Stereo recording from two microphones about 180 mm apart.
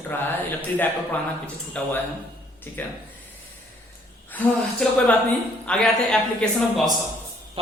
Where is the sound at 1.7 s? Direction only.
5° left (ahead or behind).